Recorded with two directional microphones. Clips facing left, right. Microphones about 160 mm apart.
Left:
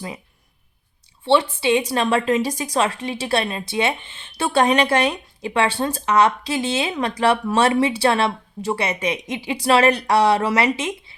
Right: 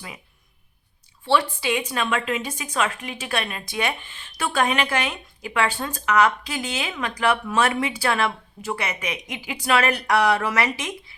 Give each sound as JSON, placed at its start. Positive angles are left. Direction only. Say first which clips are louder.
{"t": 1.2, "sound": "a woman's voice", "louder": "left 4 dB", "side_deg": 25}